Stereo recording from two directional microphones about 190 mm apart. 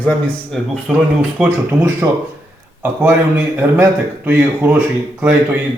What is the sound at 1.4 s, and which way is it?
A man's voice, 10° right (ahead or behind).